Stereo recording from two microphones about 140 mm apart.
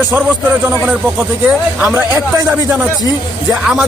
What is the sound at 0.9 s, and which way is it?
Speech, 5° right (ahead or behind).